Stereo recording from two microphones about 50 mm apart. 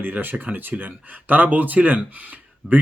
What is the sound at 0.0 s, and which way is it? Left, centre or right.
Speech, right.